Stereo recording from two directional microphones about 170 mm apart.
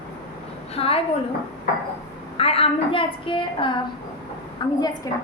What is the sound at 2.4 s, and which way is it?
A woman's voice, 35° left (ahead or behind).